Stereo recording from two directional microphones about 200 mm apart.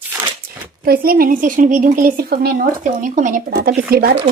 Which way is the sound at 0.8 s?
45° right (ahead or behind).